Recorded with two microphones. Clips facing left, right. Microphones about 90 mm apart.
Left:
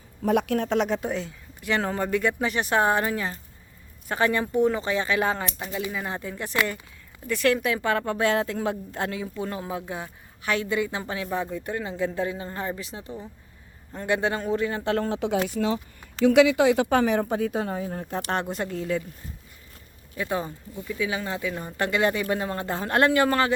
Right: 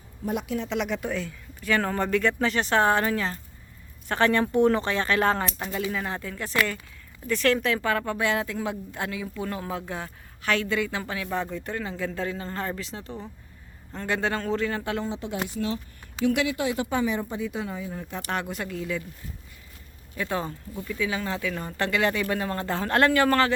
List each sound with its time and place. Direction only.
0.2 s speech: 75° left (ahead or behind); by 0.8 s 55° left (ahead or behind)
0.8 s speech: 35° left (ahead or behind); by 5.8 s centre (ahead or behind)
5.8 s a woman's voice: 10° left (ahead or behind)
11.3 s speech: 15° left (ahead or behind)
15.0 s speech: 75° left (ahead or behind)
16.4 s speech: 90° left
16.9 s speech: 65° left (ahead or behind); by 18.2 s 45° left (ahead or behind)
18.3 s a woman's voice: 30° left (ahead or behind)
20.1 s a woman's voice: 15° left (ahead or behind)